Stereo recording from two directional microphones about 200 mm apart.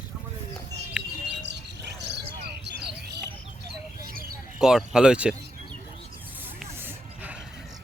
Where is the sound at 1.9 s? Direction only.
55° right (ahead or behind).